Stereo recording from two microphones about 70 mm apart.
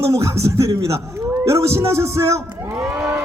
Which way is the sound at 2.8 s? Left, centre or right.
Centre.